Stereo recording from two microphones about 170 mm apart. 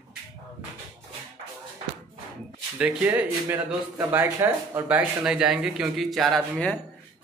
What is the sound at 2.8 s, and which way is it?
Speech, 10° right (ahead or behind).